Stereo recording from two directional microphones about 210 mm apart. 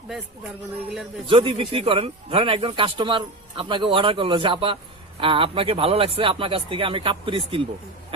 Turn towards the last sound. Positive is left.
turn(degrees=-25)  # may be behind; listen again after turning